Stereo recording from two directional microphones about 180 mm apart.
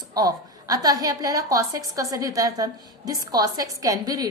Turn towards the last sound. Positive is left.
turn(degrees=-20)  # may be behind; listen again after turning